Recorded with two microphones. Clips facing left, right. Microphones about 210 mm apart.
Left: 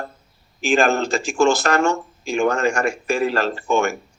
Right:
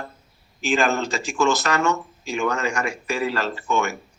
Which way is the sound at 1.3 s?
30° left (ahead or behind).